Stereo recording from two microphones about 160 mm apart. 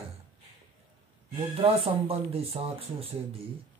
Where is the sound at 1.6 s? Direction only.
35° right (ahead or behind).